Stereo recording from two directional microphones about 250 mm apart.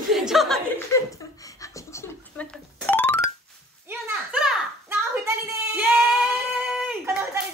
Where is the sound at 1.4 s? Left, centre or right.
Centre.